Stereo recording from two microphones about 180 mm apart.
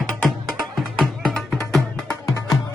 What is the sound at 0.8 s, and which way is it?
Music, centre (ahead or behind).